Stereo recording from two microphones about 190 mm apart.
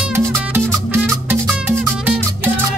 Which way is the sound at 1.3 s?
10° right (ahead or behind).